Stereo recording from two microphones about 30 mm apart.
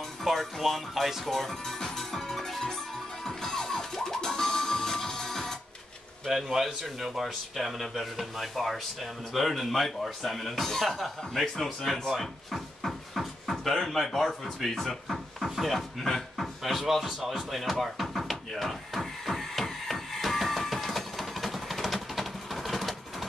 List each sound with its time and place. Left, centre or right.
0.2 s speech: centre
3.3 s music: centre
6.3 s a man's voice: centre
12.1 s a sound: centre
13.8 s speech: centre
16.9 s music: centre